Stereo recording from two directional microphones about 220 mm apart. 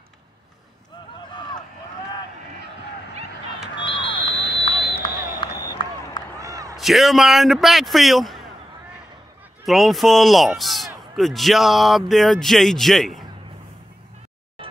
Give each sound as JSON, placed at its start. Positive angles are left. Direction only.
{"t": 4.4, "sound": "vehicle", "side_deg": 50}
{"t": 5.4, "sound": "run", "side_deg": 20}
{"t": 6.4, "sound": "a sound", "side_deg": -15}
{"t": 6.8, "sound": "speech", "side_deg": 0}
{"t": 9.7, "sound": "speech", "side_deg": 0}